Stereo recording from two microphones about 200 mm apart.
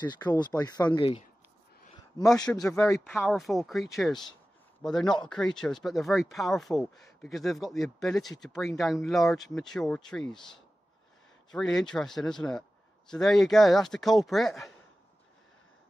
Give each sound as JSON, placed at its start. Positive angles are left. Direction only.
{"t": 0.0, "sound": "speech", "side_deg": 20}
{"t": 2.3, "sound": "speech", "side_deg": 20}
{"t": 2.9, "sound": "speech", "side_deg": 0}
{"t": 11.5, "sound": "speech", "side_deg": 0}